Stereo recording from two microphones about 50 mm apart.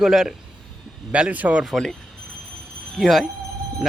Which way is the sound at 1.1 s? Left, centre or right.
Right.